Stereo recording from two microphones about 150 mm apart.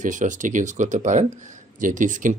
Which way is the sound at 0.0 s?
55° right (ahead or behind).